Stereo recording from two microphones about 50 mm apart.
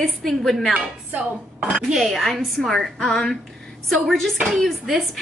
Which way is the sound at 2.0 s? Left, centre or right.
Centre.